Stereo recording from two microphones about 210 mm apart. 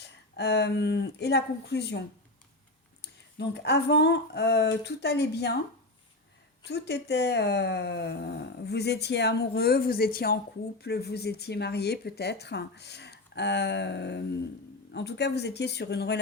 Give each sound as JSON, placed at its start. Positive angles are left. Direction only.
{"t": 0.3, "sound": "speech", "side_deg": 50}
{"t": 6.7, "sound": "speech", "side_deg": 50}